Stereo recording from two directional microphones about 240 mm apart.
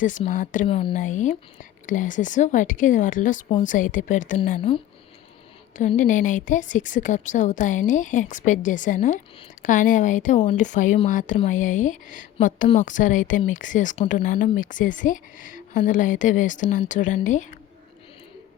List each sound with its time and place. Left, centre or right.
0.0 s speech: left
5.7 s speech: left